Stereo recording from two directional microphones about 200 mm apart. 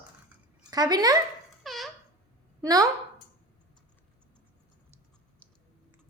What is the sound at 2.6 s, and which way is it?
Speech, 20° right (ahead or behind).